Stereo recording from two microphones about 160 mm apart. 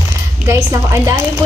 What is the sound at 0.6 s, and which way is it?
Speech, 20° right (ahead or behind).